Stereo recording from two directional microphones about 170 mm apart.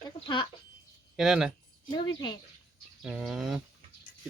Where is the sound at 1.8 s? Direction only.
25° left (ahead or behind).